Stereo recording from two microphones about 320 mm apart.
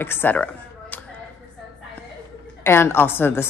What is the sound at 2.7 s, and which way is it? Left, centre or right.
Speech, centre.